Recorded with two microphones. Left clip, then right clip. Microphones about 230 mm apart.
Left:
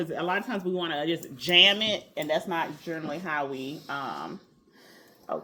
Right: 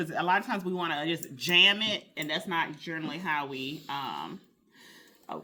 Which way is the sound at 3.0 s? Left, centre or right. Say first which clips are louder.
Left 1 dB; right.